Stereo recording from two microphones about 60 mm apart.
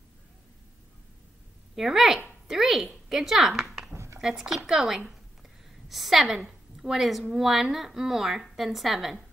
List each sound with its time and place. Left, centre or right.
1.8 s a woman's voice: centre
3.9 s a sound: right
4.2 s a woman's voice: centre